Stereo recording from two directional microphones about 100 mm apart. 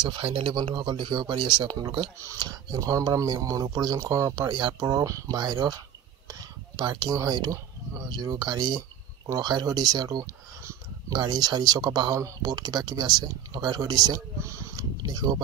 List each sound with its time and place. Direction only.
0.0 s speech: 55° right (ahead or behind)
1.8 s speech: 40° right (ahead or behind)
4.5 s speech: 45° right (ahead or behind)
4.8 s speech: 35° right (ahead or behind)
6.8 s speech: 45° right (ahead or behind)
10.6 s a sound: 30° right (ahead or behind)
11.1 s speech: 45° right (ahead or behind)
14.8 s speech: 45° right (ahead or behind)